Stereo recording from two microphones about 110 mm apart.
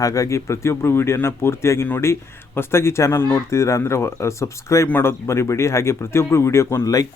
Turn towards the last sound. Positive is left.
turn(degrees=30)  # may be behind; listen again after turning